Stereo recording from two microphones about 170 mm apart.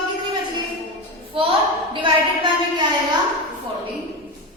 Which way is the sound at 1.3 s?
30° right (ahead or behind).